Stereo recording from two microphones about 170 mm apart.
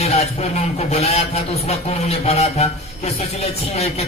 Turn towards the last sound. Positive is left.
turn(degrees=40)  # may be behind; listen again after turning